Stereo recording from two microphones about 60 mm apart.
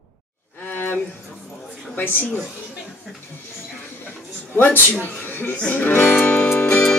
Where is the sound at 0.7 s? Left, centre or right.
Left.